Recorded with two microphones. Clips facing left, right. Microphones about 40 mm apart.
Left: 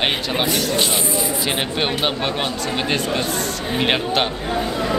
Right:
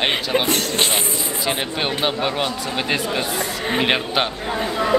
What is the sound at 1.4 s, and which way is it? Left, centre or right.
Speech, centre.